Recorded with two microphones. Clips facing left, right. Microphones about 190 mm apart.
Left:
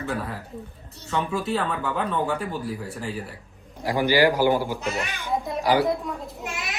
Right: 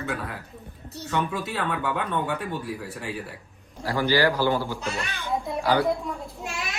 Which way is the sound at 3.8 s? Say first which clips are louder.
Left 2 dB; 15° left (ahead or behind).